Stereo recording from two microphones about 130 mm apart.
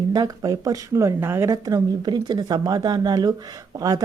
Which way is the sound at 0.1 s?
30° right (ahead or behind).